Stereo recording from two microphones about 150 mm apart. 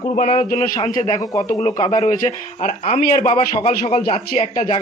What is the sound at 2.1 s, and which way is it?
Speech, 55° left (ahead or behind).